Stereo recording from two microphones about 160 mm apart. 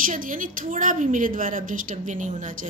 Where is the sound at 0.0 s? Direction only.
55° right (ahead or behind).